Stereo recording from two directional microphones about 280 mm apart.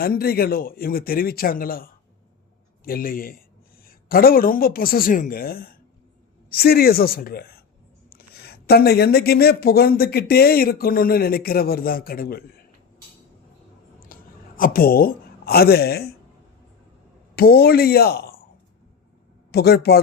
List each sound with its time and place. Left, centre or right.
0.0 s speech: left
14.0 s a sound: left
17.3 s speech: left
19.5 s speech: left